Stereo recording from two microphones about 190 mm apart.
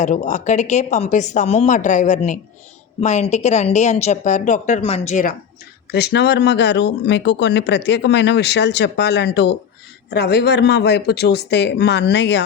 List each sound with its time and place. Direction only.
0.0 s a woman's voice: 40° left (ahead or behind)
5.9 s speech: 60° left (ahead or behind)